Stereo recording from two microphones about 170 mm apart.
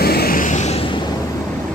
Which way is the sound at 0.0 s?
65° left (ahead or behind).